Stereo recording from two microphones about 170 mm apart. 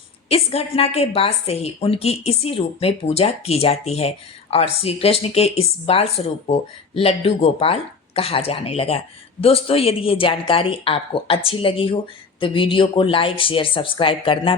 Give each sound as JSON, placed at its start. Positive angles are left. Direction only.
{"t": 0.3, "sound": "speech", "side_deg": 35}